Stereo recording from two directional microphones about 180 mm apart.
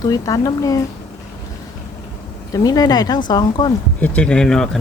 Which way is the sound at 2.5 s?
20° left (ahead or behind).